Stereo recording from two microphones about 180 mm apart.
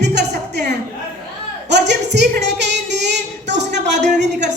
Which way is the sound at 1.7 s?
70° right (ahead or behind).